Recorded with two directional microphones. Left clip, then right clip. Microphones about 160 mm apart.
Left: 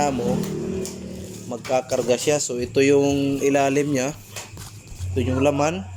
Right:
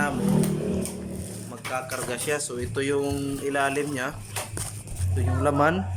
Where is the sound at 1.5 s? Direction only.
30° left (ahead or behind).